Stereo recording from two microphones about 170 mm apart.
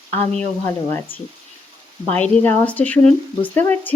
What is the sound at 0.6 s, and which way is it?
Speech, 15° left (ahead or behind).